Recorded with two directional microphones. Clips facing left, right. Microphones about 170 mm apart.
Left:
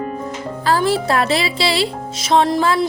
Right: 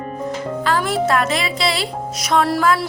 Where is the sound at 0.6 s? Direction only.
35° left (ahead or behind).